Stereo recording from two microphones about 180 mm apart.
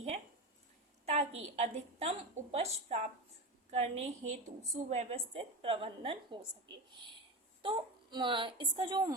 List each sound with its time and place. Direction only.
1.0 s a woman's voice: 35° right (ahead or behind)